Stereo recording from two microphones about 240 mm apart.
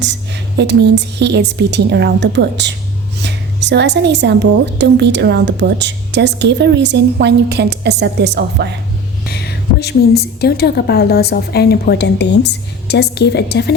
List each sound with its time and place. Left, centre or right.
0.0 s a woman's voice: right
9.2 s a woman's voice: left